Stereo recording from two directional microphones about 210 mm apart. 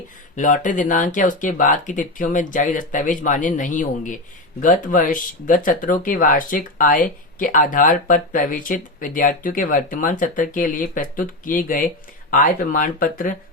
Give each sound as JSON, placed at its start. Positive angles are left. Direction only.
{"t": 0.3, "sound": "speech", "side_deg": 35}